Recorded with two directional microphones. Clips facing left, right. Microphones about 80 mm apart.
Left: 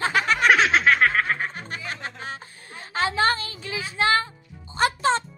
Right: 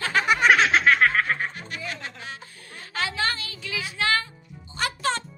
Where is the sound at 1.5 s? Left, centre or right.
Left.